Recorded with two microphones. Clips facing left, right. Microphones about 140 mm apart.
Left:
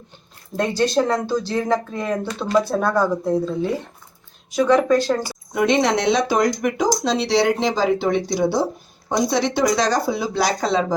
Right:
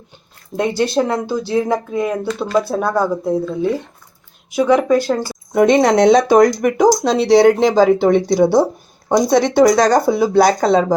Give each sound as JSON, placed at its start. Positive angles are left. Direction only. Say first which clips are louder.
{"t": 0.5, "sound": "speech", "louder": "right 2 dB", "side_deg": -15}
{"t": 4.5, "sound": "speech", "louder": "right 3 dB", "side_deg": -10}
{"t": 5.5, "sound": "speech", "louder": "right 7 dB", "side_deg": -50}